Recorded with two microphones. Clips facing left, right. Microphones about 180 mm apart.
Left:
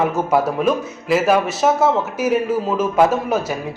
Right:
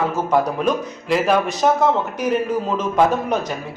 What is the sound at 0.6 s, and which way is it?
Speech, 5° left (ahead or behind).